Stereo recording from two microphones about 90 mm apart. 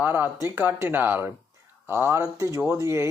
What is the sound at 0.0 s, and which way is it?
Speech, 20° right (ahead or behind).